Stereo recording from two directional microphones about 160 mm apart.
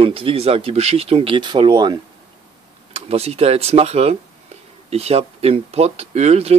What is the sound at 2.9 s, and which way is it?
Speech, 40° right (ahead or behind).